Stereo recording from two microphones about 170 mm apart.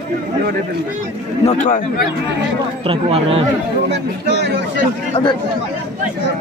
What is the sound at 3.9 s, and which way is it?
Speech, 90° right.